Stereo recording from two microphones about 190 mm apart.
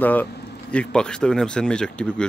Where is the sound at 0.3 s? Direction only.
60° left (ahead or behind).